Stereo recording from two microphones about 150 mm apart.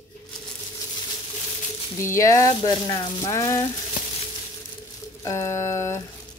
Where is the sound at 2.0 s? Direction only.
20° left (ahead or behind).